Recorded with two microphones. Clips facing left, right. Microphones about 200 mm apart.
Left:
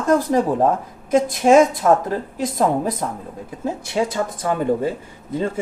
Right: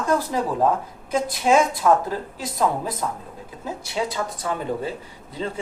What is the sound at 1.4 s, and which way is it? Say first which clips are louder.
Speech: left 4 dB; 45° left (ahead or behind).